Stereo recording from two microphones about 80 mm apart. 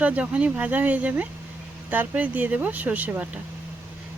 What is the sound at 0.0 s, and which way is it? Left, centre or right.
Speech, centre.